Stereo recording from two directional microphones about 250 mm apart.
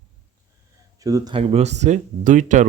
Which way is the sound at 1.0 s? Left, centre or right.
Centre.